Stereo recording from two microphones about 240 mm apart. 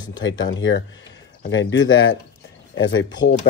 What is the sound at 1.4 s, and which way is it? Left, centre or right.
Speech, left.